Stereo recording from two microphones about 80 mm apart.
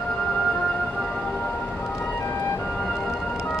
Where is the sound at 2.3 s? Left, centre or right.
Left.